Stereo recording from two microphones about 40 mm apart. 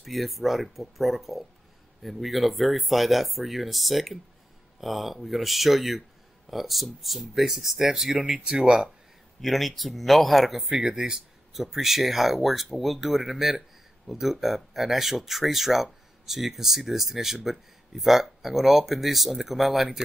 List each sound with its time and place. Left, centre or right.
0.0 s speech: centre
9.4 s speech: centre
10.9 s speech: centre